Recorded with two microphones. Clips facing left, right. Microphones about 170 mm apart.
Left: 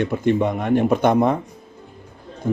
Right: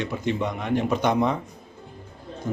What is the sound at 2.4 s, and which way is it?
Speech, 55° left (ahead or behind).